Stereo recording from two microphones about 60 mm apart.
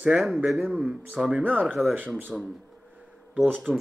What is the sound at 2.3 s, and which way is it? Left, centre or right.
Speech, centre.